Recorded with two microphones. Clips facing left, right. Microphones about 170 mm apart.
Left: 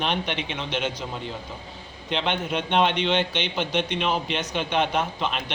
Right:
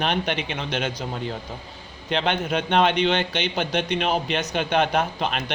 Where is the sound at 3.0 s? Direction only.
40° right (ahead or behind).